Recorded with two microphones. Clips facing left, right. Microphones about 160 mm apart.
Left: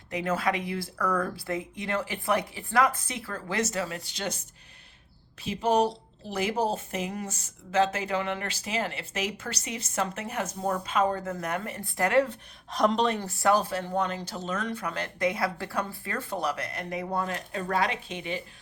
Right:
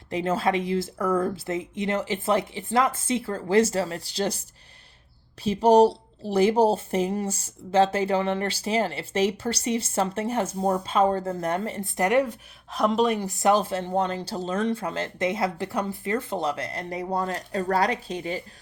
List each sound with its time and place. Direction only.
0.1 s speech: 30° right (ahead or behind)